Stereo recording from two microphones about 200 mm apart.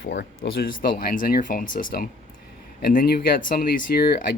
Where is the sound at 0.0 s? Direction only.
60° left (ahead or behind).